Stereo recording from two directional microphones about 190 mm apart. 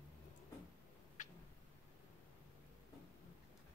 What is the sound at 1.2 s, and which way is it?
Tick-tock, 40° left (ahead or behind).